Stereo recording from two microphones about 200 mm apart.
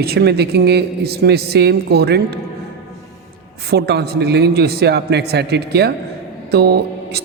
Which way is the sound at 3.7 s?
55° right (ahead or behind).